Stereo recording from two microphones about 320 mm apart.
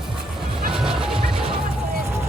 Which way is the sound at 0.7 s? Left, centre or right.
Centre.